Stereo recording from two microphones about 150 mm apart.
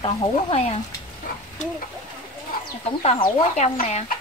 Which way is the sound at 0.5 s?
45° left (ahead or behind).